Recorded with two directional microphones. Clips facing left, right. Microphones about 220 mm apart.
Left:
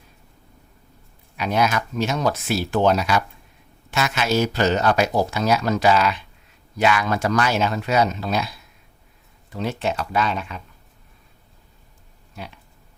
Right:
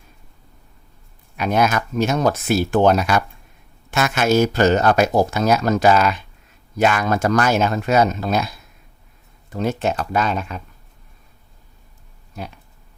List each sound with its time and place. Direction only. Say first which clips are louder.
1.4 s speech: right 3 dB; 50° right (ahead or behind)